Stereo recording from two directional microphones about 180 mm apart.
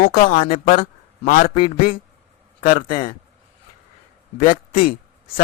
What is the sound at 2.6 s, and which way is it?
Speech, 45° left (ahead or behind).